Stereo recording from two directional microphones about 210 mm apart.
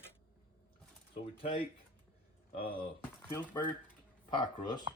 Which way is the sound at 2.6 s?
45° left (ahead or behind).